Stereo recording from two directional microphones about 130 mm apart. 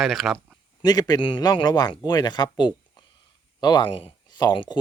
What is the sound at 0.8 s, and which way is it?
A man's voice, 30° left (ahead or behind).